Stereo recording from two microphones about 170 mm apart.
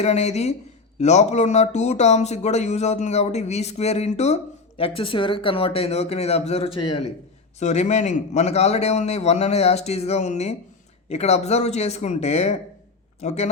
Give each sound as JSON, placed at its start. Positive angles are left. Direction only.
{"t": 0.0, "sound": "speech", "side_deg": 40}
{"t": 6.7, "sound": "a man's voice", "side_deg": 30}
{"t": 7.6, "sound": "speech", "side_deg": 40}